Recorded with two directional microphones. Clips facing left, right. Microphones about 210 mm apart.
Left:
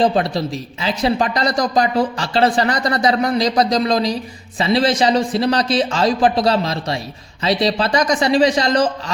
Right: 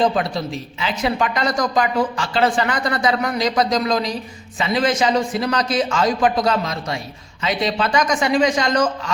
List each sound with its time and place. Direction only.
0.0 s speech: 35° left (ahead or behind)